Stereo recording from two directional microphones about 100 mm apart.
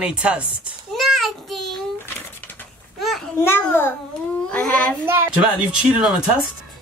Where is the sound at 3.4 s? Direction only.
25° left (ahead or behind).